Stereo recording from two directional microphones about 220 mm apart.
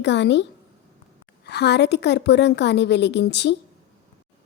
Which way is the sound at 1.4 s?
50° left (ahead or behind).